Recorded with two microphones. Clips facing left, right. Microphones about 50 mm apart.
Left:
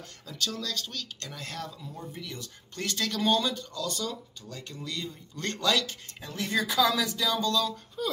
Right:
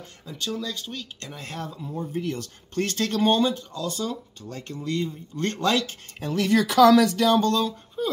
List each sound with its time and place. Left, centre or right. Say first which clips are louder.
0.3 s speech: right 3 dB; centre
4.5 s speech: right 8 dB; right
6.2 s speech: right 8 dB; right
8.0 s a sound: right 4 dB; right